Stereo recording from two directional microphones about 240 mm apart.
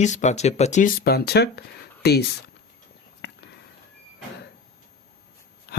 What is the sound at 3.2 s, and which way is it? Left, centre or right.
Sniff, left.